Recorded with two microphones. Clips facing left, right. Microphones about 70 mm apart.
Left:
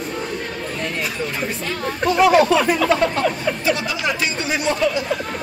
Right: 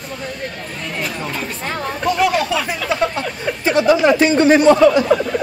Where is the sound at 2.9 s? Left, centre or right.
Centre.